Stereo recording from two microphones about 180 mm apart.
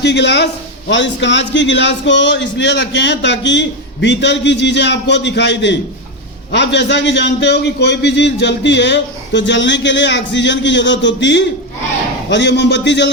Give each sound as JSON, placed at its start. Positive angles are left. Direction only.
{"t": 0.0, "sound": "speech", "side_deg": 70}
{"t": 0.9, "sound": "a man's voice", "side_deg": 90}